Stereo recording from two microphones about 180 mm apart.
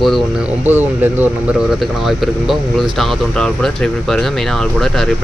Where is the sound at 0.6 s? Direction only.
10° right (ahead or behind).